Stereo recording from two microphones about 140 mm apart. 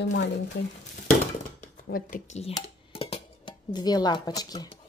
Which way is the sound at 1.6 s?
80° left.